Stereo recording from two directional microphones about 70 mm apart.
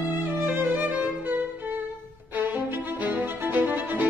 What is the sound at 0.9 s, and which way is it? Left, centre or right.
Violin, right.